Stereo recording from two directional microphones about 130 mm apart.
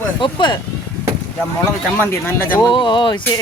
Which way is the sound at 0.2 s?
35° left (ahead or behind).